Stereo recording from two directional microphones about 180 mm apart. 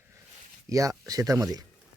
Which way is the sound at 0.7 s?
20° right (ahead or behind).